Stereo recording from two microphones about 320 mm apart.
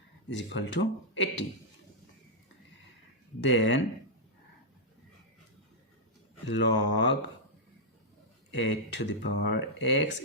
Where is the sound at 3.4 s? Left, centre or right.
Left.